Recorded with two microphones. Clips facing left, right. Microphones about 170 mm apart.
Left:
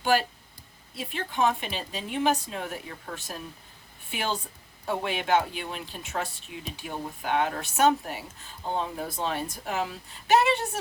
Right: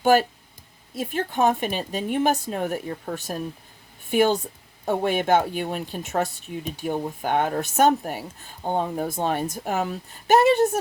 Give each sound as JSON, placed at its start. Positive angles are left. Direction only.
{"t": 0.0, "sound": "speech", "side_deg": -50}